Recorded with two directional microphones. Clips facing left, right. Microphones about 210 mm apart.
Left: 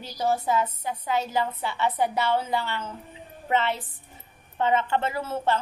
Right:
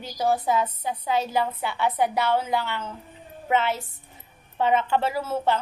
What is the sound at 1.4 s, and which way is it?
A woman's voice, 5° right (ahead or behind).